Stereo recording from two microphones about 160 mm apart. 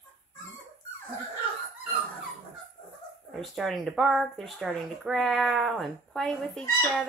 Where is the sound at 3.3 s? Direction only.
Centre (ahead or behind).